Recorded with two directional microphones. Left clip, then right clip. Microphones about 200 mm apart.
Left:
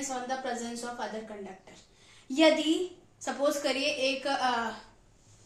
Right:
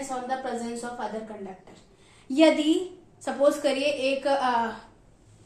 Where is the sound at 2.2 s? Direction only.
20° right (ahead or behind).